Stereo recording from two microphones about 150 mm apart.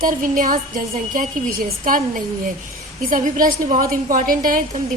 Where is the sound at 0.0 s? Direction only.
65° right (ahead or behind).